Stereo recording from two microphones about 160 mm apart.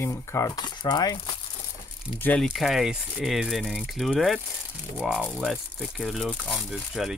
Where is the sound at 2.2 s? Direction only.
10° left (ahead or behind).